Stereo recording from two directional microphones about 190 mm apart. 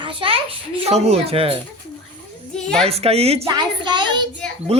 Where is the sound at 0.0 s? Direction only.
25° right (ahead or behind).